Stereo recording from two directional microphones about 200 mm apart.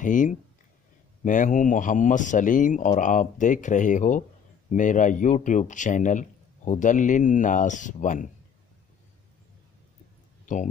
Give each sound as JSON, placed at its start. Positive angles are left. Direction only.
{"t": 0.0, "sound": "a man's voice", "side_deg": 40}
{"t": 10.4, "sound": "speech", "side_deg": 40}